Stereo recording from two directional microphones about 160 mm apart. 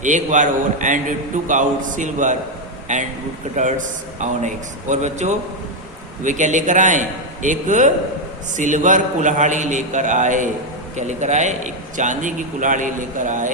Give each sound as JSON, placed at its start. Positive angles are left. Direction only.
{"t": 0.0, "sound": "a man's voice", "side_deg": -50}